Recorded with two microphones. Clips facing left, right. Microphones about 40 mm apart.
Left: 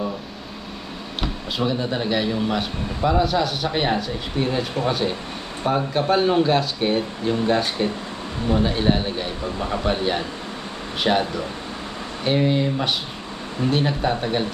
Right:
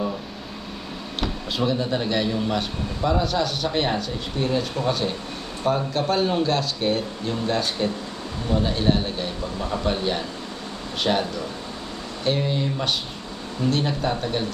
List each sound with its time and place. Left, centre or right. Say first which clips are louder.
1.2 s speech: even; centre